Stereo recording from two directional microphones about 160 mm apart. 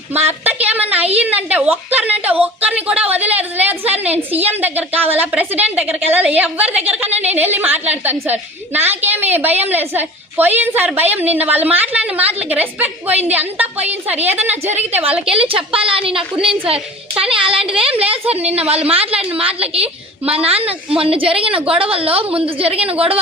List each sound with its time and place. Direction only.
0.3 s a sound: 10° right (ahead or behind)
1.2 s a woman's voice: 10° right (ahead or behind)
15.7 s a woman's voice: 35° right (ahead or behind)